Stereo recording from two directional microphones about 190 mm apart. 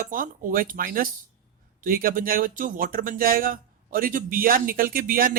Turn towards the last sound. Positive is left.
turn(degrees=-50)  # may be behind; listen again after turning